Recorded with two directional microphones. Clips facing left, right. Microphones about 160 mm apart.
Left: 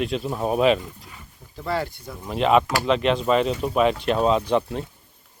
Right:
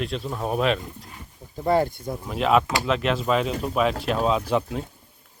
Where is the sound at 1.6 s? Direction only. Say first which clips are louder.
Right 6 dB; 50° right (ahead or behind).